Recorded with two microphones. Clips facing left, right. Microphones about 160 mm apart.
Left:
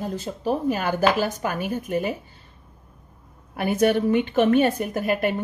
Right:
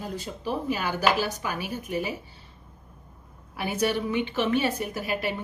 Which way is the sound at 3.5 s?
50° left (ahead or behind).